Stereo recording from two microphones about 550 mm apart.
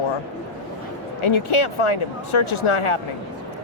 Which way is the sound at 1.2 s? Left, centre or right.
Left.